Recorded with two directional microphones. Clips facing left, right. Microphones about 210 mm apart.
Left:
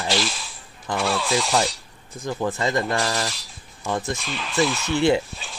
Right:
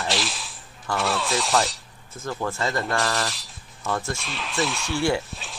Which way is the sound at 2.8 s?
Centre (ahead or behind).